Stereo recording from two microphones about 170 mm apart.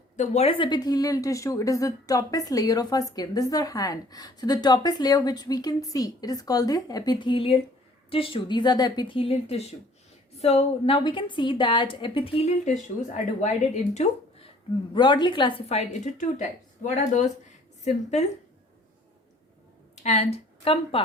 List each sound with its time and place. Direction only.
0.2 s a woman's voice: 35° left (ahead or behind)
13.9 s a sound: 40° left (ahead or behind)
14.9 s a woman's voice: 25° left (ahead or behind)
20.0 s speech: 40° left (ahead or behind)